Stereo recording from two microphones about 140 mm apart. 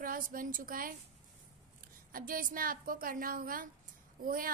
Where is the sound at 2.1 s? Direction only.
85° right.